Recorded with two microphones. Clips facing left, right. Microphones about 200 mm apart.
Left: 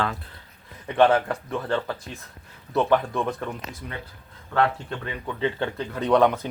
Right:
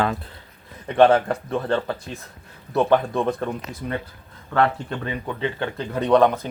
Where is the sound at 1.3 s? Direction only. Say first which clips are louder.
Right 4 dB; 25° right (ahead or behind).